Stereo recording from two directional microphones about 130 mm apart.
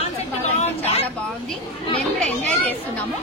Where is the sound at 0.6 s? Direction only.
55° left (ahead or behind).